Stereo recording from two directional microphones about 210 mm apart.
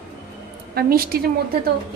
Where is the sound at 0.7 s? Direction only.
45° right (ahead or behind).